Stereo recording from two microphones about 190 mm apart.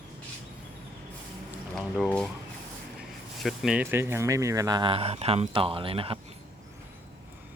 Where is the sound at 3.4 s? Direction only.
Centre (ahead or behind); by 6.2 s 30° right (ahead or behind).